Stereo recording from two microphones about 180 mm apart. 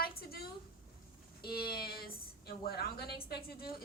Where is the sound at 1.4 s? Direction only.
60° left (ahead or behind).